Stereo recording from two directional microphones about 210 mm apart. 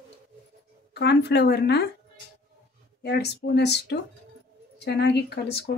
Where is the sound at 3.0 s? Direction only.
50° left (ahead or behind).